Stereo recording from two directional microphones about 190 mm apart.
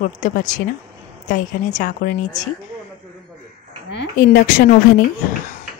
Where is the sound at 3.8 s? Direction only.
60° left (ahead or behind).